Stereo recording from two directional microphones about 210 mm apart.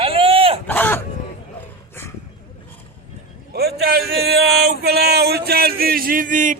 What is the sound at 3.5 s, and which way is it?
Speech, 50° right (ahead or behind).